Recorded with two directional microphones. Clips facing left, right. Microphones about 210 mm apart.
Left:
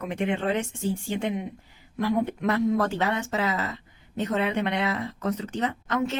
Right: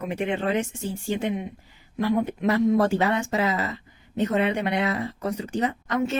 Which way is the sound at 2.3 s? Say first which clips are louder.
Right 3 dB; 5° right (ahead or behind).